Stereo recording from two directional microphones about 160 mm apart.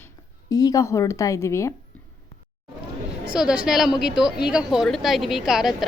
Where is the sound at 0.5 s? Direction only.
20° left (ahead or behind).